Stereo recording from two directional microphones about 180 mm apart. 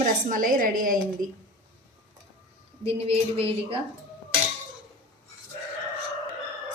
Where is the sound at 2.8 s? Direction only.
35° right (ahead or behind).